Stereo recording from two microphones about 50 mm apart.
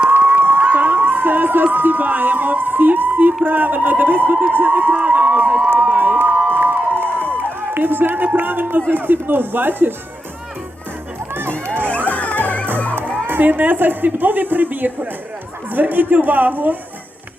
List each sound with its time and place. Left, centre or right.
0.2 s a sound: right
0.6 s a woman's voice: right
6.5 s music: right
8.9 s speech: right
11.6 s music: right
12.0 s music: left
13.2 s a woman's voice: right